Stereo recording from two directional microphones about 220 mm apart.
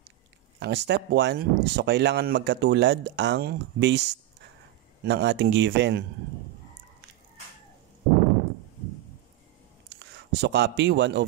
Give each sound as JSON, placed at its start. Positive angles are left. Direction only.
{"t": 0.6, "sound": "speech", "side_deg": -50}
{"t": 9.9, "sound": "speech", "side_deg": -50}